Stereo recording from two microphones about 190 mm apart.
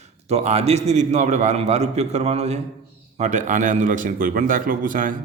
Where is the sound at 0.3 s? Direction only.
35° right (ahead or behind).